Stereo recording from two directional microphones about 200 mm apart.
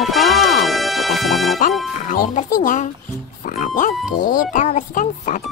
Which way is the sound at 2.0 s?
40° left (ahead or behind).